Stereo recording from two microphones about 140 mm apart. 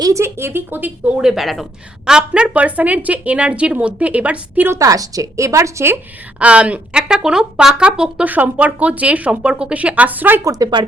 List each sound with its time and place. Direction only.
0.0 s speech: 20° right (ahead or behind)
6.4 s speech: 10° right (ahead or behind)
10.5 s speech: 30° right (ahead or behind)